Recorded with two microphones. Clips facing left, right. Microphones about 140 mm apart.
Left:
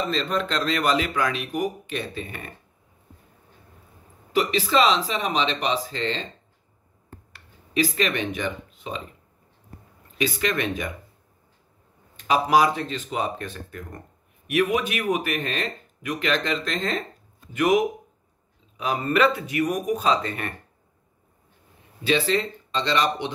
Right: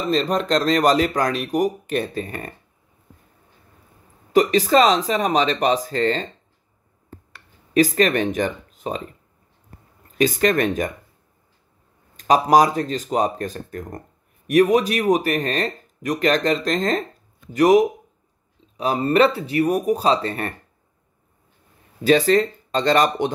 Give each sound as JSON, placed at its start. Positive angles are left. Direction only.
{"t": 0.1, "sound": "speech", "side_deg": -40}
{"t": 4.3, "sound": "speech", "side_deg": -45}
{"t": 7.7, "sound": "speech", "side_deg": -45}
{"t": 10.1, "sound": "speech", "side_deg": -45}
{"t": 12.2, "sound": "speech", "side_deg": -40}
{"t": 22.0, "sound": "speech", "side_deg": -45}